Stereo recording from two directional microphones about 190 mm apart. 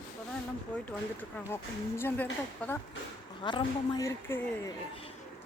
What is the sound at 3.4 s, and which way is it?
Speech, 25° left (ahead or behind).